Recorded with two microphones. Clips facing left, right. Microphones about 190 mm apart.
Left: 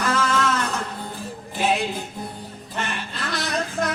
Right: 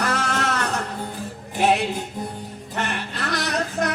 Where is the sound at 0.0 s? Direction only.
65° right (ahead or behind).